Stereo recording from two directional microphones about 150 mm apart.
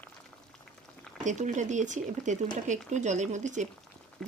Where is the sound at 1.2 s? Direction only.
55° right (ahead or behind).